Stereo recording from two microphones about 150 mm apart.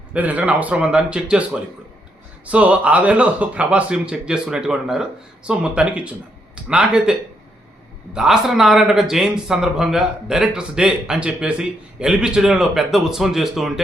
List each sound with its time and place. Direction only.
0.1 s speech: 10° right (ahead or behind)
2.5 s speech: 10° right (ahead or behind)